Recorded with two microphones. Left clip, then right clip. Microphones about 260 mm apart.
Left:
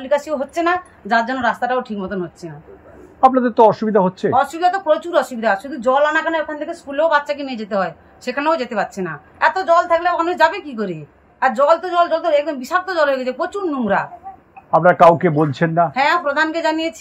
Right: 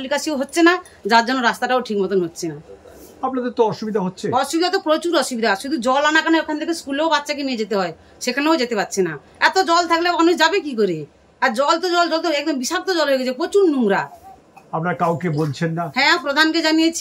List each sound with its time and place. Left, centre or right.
0.0 s speech: centre
3.3 s speech: centre
4.4 s speech: centre
15.2 s speech: left
15.9 s speech: centre